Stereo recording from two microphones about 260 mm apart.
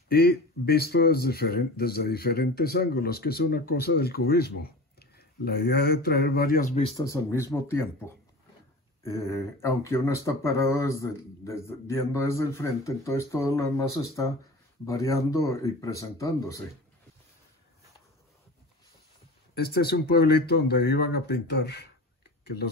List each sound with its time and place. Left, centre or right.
0.1 s speech: left
7.0 s speech: centre
19.5 s speech: left
22.4 s a sound: left